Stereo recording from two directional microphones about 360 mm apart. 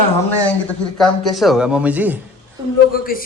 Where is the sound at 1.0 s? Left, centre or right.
Centre.